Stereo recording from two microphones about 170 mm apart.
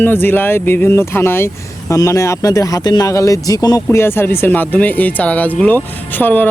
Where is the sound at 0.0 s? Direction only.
10° left (ahead or behind).